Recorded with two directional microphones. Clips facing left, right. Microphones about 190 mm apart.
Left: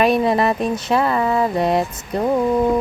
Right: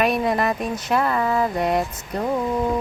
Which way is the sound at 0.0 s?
30° left (ahead or behind).